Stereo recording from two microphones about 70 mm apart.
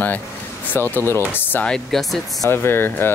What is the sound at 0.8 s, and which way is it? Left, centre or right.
Speech, left.